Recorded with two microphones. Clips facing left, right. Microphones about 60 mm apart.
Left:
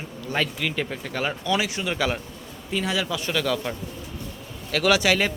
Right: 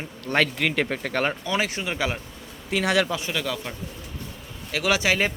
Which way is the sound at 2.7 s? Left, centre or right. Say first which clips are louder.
Right 4 dB; right.